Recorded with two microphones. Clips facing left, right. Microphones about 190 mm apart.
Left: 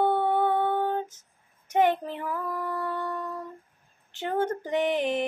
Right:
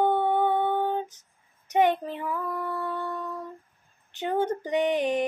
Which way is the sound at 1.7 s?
10° right (ahead or behind).